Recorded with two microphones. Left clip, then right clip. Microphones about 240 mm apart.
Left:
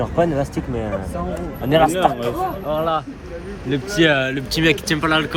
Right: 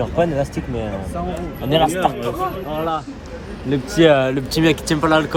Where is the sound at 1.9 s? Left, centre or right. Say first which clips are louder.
Left 1 dB; centre.